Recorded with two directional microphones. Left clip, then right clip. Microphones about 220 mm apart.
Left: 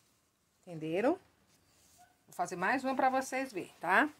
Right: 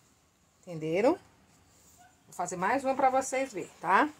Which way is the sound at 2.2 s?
35° left (ahead or behind).